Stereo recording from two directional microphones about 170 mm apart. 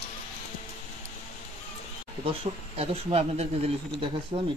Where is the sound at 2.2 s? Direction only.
35° right (ahead or behind).